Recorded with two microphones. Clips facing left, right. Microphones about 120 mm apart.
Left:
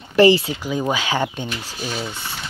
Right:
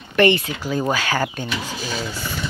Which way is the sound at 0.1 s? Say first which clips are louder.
Left 3 dB; 30° left (ahead or behind).